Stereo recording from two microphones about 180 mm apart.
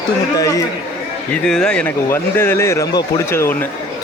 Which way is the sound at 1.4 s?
5° left (ahead or behind).